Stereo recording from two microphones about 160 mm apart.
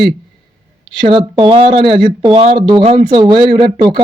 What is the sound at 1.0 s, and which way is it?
Speech, 30° right (ahead or behind).